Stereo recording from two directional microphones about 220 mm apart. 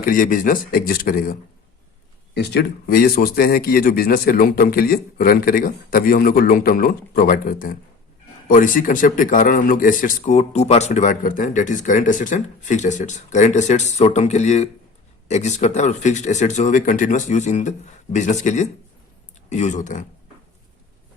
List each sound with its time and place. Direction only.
0.0 s a man's voice: 40° left (ahead or behind)